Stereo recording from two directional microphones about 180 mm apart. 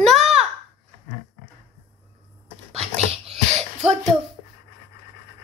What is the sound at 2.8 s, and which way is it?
Dog, 35° right (ahead or behind).